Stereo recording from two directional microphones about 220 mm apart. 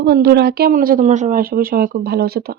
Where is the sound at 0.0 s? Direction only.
45° right (ahead or behind).